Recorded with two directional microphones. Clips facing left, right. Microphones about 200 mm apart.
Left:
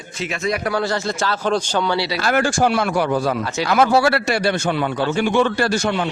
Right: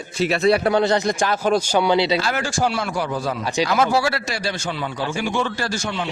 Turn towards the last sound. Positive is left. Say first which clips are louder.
# left 6 dB
turn(degrees=60)  # may be behind; listen again after turning